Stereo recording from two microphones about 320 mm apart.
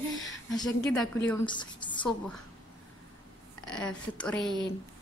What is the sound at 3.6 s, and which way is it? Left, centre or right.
Speech, centre.